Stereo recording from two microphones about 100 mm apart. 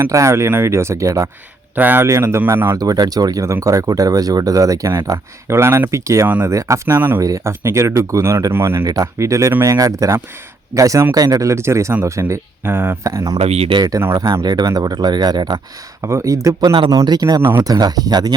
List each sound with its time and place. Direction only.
0.1 s speech: 30° right (ahead or behind)
1.7 s speech: 20° right (ahead or behind)
2.7 s speech: 40° right (ahead or behind)
6.2 s speech: 15° right (ahead or behind)
6.5 s speech: 30° right (ahead or behind)
7.2 s speech: 35° right (ahead or behind)
13.1 s speech: 40° right (ahead or behind)
13.4 s speech: 90° right
13.7 s speech: 40° right (ahead or behind)
16.0 s speech: 30° right (ahead or behind)